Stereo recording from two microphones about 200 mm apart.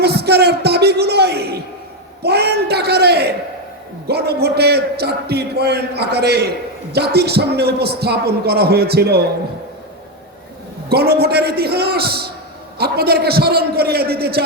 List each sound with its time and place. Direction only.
0.0 s a sound: 55° right (ahead or behind)
4.1 s a man's voice: 55° right (ahead or behind)
10.8 s a man's voice: 50° right (ahead or behind)